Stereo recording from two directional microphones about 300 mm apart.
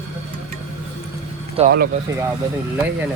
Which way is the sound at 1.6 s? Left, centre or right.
Right.